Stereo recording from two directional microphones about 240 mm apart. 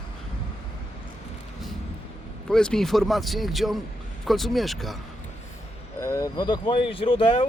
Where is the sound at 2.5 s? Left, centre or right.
Centre.